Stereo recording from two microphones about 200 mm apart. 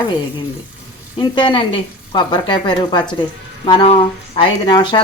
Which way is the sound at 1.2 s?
25° left (ahead or behind).